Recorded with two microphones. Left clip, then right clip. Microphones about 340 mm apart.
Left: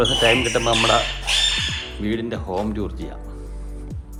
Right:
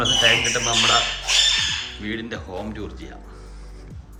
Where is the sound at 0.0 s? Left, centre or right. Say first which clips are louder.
Even; centre.